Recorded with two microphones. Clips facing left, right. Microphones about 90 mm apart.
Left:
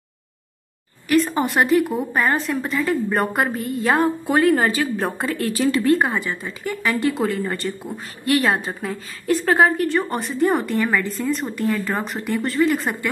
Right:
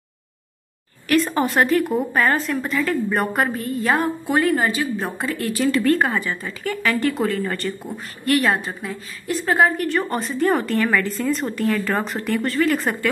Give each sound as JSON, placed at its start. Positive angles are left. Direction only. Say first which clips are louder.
{"t": 1.0, "sound": "speech", "louder": "even", "side_deg": 10}
{"t": 2.3, "sound": "speech", "louder": "even", "side_deg": 20}
{"t": 3.1, "sound": "a woman's voice", "louder": "even", "side_deg": 35}
{"t": 9.9, "sound": "speech", "louder": "left 1 dB", "side_deg": 20}